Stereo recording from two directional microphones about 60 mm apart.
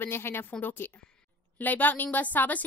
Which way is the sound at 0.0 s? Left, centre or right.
Left.